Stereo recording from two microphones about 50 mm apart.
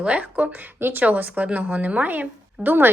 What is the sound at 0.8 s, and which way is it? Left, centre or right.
Speech, right.